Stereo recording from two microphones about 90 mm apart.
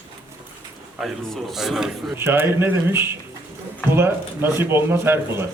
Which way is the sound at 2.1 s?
25° right (ahead or behind).